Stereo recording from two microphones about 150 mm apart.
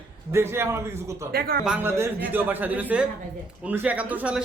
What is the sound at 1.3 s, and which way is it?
Speech, 85° right.